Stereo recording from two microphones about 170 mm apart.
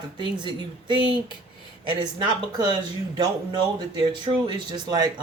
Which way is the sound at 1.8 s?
30° right (ahead or behind).